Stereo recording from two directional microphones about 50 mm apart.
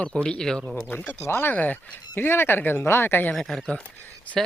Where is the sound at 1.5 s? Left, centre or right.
Left.